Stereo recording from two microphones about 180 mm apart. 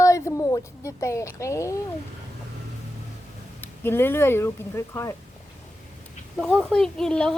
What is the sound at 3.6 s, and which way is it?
A woman's voice, 10° left (ahead or behind).